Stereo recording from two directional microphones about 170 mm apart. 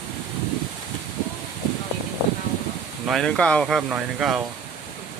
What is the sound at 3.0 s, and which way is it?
Speech, centre (ahead or behind).